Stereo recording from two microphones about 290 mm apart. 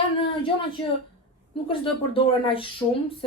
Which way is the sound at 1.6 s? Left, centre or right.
Centre.